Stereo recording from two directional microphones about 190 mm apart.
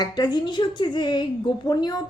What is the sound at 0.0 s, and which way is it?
A woman's voice, 20° left (ahead or behind).